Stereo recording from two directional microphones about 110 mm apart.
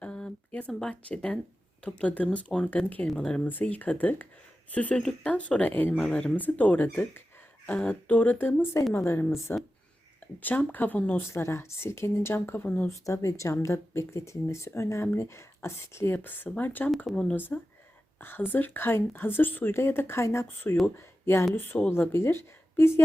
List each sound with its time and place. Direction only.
0.0 s a sound: 10° left (ahead or behind)
0.7 s speech: 5° left (ahead or behind)
12.9 s speech: 30° left (ahead or behind)